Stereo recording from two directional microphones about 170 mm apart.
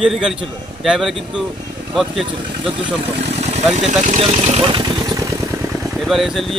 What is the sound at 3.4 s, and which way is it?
Speech, 40° right (ahead or behind).